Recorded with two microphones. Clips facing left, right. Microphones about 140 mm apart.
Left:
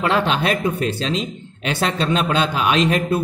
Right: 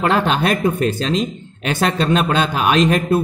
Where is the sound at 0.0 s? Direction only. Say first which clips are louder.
Right 2 dB; 45° right (ahead or behind).